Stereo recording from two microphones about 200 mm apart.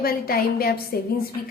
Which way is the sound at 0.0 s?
50° left (ahead or behind).